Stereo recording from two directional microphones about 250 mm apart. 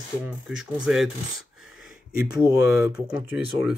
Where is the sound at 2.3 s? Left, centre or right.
Centre.